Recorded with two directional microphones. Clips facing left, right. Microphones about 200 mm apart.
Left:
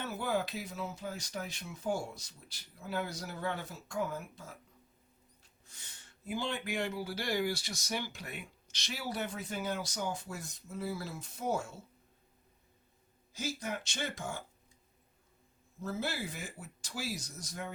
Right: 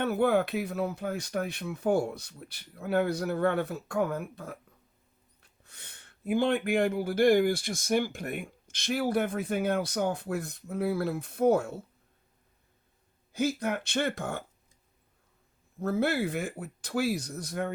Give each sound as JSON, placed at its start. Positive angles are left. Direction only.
{"t": 0.0, "sound": "speech", "side_deg": -60}
{"t": 13.3, "sound": "speech", "side_deg": -60}
{"t": 15.8, "sound": "speech", "side_deg": -60}